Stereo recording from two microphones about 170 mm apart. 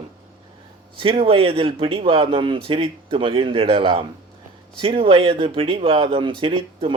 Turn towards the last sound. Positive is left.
turn(degrees=-30)  # may be behind; listen again after turning